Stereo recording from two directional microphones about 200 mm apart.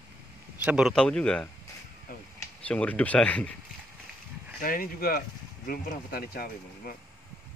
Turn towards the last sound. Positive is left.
turn(degrees=45)  # may be behind; listen again after turning